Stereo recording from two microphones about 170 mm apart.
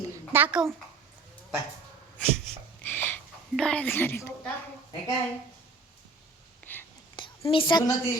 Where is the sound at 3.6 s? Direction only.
5° left (ahead or behind).